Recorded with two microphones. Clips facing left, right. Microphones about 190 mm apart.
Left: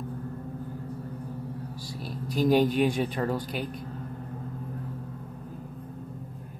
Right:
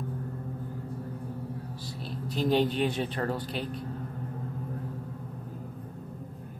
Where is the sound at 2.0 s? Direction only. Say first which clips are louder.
Left 4 dB; 25° right (ahead or behind).